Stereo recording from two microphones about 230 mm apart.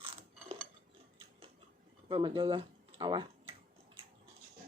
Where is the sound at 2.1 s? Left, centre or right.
Centre.